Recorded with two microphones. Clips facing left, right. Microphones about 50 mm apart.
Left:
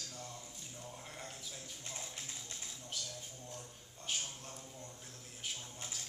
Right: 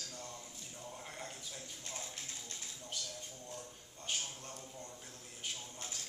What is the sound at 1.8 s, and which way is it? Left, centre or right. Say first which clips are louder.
Tap: even; centre.